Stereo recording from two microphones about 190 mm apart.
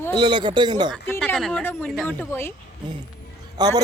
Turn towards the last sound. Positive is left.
turn(degrees=-20)  # may be behind; listen again after turning